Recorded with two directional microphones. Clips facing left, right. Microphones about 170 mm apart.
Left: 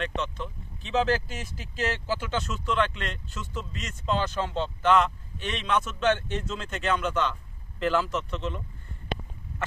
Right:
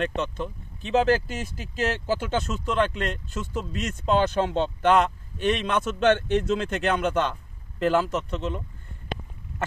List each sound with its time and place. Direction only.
0.0 s speech: 50° right (ahead or behind)